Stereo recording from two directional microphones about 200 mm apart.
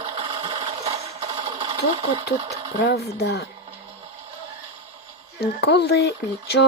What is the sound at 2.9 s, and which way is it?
Speech, 55° left (ahead or behind).